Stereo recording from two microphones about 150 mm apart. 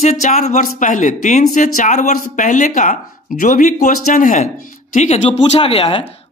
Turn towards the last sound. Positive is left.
turn(degrees=40)  # may be behind; listen again after turning